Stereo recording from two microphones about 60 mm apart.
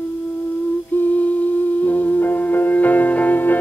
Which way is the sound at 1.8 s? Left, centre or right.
Left.